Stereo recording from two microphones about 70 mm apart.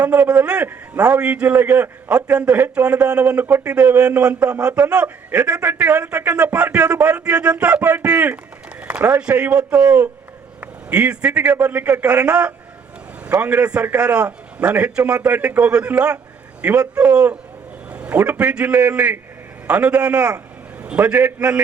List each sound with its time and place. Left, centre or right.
0.0 s a man's voice: right